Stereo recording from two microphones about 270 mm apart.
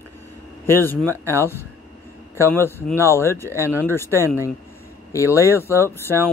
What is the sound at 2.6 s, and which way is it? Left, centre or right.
Speech, centre.